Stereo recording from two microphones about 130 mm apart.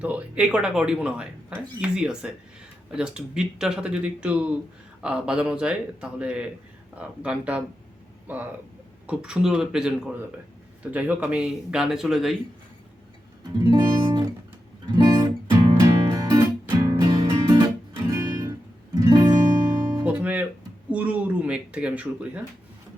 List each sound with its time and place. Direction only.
0.0 s speech: 10° right (ahead or behind)
13.6 s music: 35° right (ahead or behind)
18.9 s guitar: 30° right (ahead or behind)
19.9 s guitar: 10° right (ahead or behind)
20.9 s speech: 10° right (ahead or behind)